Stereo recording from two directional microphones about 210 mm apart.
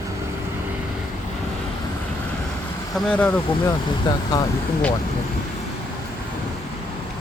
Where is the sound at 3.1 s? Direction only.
5° left (ahead or behind).